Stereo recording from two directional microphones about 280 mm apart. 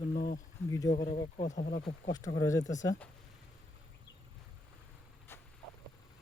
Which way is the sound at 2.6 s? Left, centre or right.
Left.